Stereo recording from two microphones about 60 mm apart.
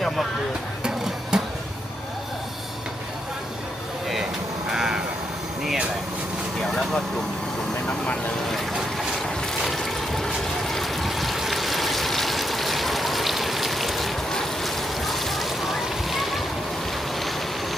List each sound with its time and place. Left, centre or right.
1.3 s a sound: centre
4.7 s crow: centre
6.7 s speech: centre
8.4 s boat: centre
9.6 s water: centre
14.3 s boat: centre